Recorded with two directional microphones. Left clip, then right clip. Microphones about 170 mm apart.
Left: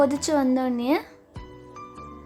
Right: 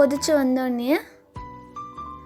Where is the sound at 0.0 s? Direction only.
20° right (ahead or behind).